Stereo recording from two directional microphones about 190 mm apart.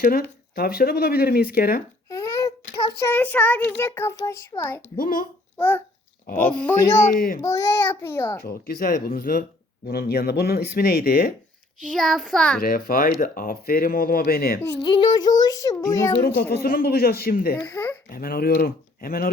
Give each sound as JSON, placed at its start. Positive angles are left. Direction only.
{"t": 0.0, "sound": "speech", "side_deg": 50}
{"t": 2.0, "sound": "a sound", "side_deg": 15}
{"t": 3.0, "sound": "a child's voice", "side_deg": 10}
{"t": 4.9, "sound": "speech", "side_deg": 45}
{"t": 5.5, "sound": "a child's voice", "side_deg": 10}
{"t": 6.3, "sound": "speech", "side_deg": 50}
{"t": 6.7, "sound": "a child's voice", "side_deg": 15}
{"t": 7.1, "sound": "speech", "side_deg": 50}
{"t": 7.4, "sound": "a child's voice", "side_deg": 15}
{"t": 8.4, "sound": "speech", "side_deg": 50}
{"t": 11.9, "sound": "a child's voice", "side_deg": 0}
{"t": 12.5, "sound": "speech", "side_deg": 50}
{"t": 14.6, "sound": "a child's voice", "side_deg": 20}
{"t": 16.2, "sound": "speech", "side_deg": 55}